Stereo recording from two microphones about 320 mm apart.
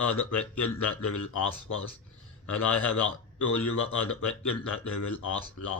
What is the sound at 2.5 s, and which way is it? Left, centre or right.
Speech, left.